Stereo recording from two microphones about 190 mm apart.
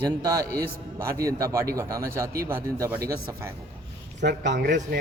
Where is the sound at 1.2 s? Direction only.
15° right (ahead or behind).